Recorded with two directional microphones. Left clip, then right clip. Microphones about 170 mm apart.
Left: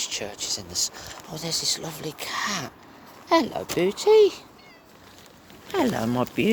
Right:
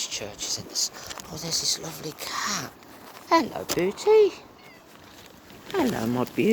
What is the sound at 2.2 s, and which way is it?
Speech, 25° left (ahead or behind).